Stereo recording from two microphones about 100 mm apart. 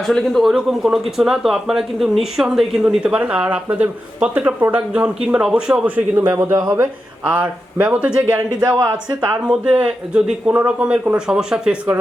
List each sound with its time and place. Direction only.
0.0 s speech: 5° left (ahead or behind)
6.1 s a man's voice: 25° right (ahead or behind)
7.3 s speech: 10° right (ahead or behind)
8.6 s speech: 35° right (ahead or behind)
9.3 s speech: 10° right (ahead or behind)